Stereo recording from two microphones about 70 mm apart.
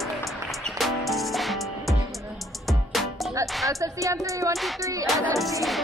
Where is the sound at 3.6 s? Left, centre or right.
Right.